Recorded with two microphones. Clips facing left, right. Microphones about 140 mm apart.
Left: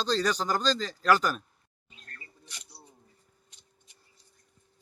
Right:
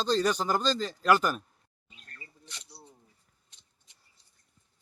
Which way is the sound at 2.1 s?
20° right (ahead or behind).